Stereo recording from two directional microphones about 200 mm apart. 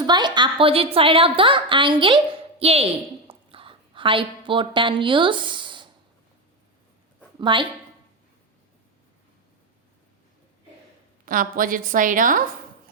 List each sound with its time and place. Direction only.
0.0 s a woman's voice: 20° right (ahead or behind)
7.3 s a woman's voice: 25° right (ahead or behind)
11.3 s a woman's voice: 45° right (ahead or behind)